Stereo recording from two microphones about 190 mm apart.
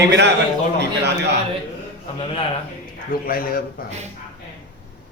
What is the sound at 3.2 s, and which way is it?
Speech, 50° left (ahead or behind).